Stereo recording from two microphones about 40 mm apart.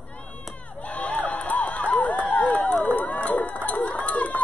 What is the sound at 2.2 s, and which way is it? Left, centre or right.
Run, left.